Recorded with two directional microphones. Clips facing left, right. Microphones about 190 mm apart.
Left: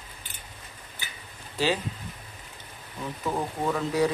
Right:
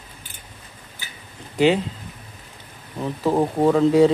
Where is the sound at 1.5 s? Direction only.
20° right (ahead or behind).